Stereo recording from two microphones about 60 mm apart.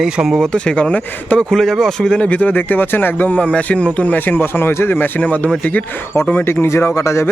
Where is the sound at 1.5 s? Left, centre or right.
Centre.